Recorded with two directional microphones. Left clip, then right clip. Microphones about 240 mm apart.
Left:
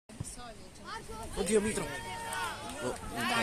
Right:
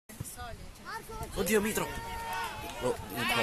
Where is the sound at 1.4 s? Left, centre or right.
Right.